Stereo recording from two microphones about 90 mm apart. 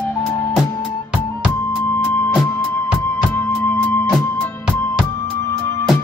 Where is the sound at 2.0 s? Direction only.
20° left (ahead or behind).